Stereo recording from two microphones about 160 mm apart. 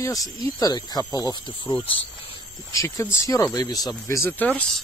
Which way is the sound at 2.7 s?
20° left (ahead or behind).